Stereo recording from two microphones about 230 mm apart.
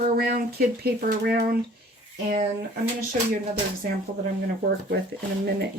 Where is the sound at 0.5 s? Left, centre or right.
Right.